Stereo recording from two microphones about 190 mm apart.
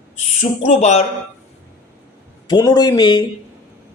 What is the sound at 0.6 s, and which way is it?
Speech, 35° left (ahead or behind).